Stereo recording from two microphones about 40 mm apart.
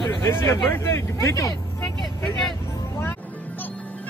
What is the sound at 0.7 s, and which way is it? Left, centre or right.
Speech, left.